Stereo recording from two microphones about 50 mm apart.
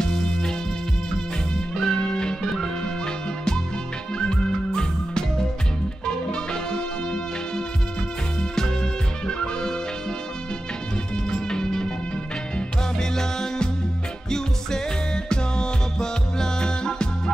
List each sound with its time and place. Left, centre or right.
1.8 s music: centre
4.2 s music: centre
11.2 s music: centre
13.1 s music: centre
15.2 s music: centre